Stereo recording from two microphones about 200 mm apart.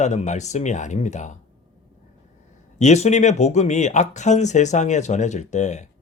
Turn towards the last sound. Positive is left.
turn(degrees=35)  # may be behind; listen again after turning